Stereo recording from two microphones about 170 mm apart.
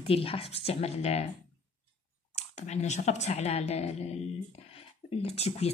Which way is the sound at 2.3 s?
40° left (ahead or behind).